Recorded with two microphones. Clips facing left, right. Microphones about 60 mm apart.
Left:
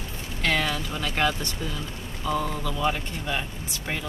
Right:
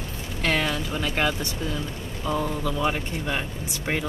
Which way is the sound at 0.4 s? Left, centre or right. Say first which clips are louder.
Right 1 dB; centre.